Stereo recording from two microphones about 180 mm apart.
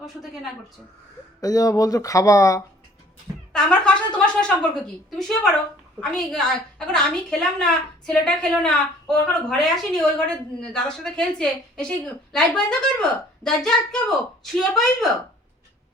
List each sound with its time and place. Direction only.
1.4 s speech: 20° left (ahead or behind)
3.5 s speech: 5° left (ahead or behind)
5.1 s a woman's voice: centre (ahead or behind)